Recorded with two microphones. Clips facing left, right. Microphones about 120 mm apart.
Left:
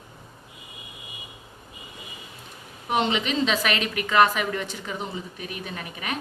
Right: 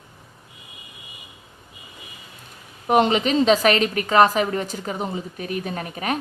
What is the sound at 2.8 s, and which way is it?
A woman's voice, 45° right (ahead or behind).